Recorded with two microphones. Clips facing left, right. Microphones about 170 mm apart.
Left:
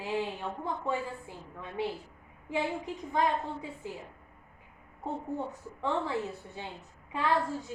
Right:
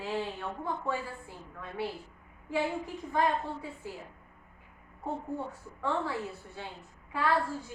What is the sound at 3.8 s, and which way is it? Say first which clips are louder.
Speech: left 2 dB; 20° left (ahead or behind).